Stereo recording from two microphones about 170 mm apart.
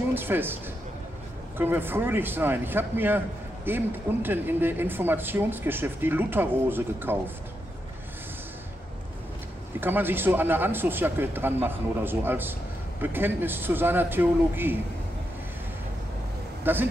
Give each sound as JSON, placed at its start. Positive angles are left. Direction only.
{"t": 0.1, "sound": "speech", "side_deg": -10}
{"t": 1.6, "sound": "speech", "side_deg": -10}
{"t": 9.8, "sound": "speech", "side_deg": -10}
{"t": 16.7, "sound": "speech", "side_deg": -10}